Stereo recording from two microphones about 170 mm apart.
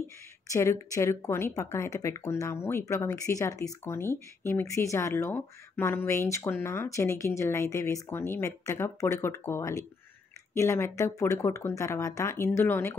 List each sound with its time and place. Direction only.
0.5 s speech: 15° left (ahead or behind)